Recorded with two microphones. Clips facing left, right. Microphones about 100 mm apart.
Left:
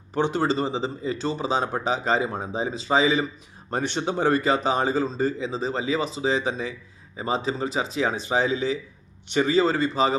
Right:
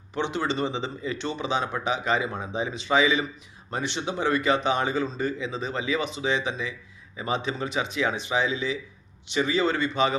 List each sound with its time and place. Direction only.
0.1 s speech: 45° left (ahead or behind)
3.7 s speech: 45° left (ahead or behind)